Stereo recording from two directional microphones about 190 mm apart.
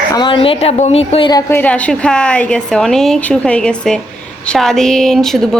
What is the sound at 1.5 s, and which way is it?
A woman's voice, 10° left (ahead or behind).